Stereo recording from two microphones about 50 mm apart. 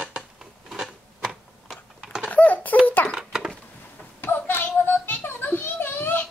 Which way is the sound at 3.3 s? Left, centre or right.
Centre.